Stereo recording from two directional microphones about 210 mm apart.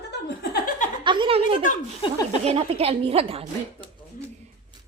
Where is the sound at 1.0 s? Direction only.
25° right (ahead or behind).